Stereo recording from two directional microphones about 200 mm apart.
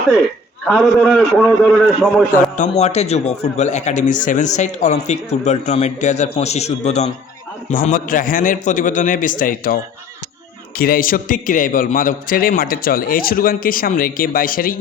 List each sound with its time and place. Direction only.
0.7 s a man's voice: centre (ahead or behind)
2.3 s a man's voice: 35° left (ahead or behind)
7.7 s a man's voice: 45° left (ahead or behind)
10.8 s a man's voice: 45° left (ahead or behind)